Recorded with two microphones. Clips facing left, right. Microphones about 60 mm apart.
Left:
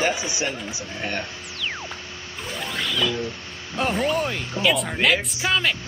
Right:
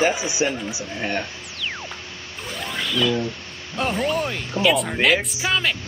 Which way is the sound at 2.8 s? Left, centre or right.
Centre.